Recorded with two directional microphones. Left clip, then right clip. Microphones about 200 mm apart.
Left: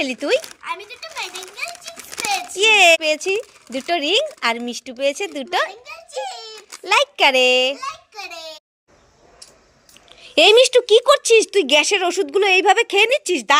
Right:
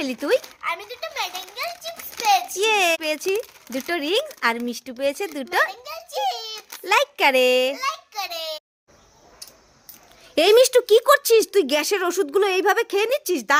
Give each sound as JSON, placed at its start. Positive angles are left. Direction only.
{"t": 0.0, "sound": "speech", "side_deg": 0}
{"t": 2.6, "sound": "a child's voice", "side_deg": 0}
{"t": 7.8, "sound": "a sound", "side_deg": -15}
{"t": 10.2, "sound": "speech", "side_deg": -5}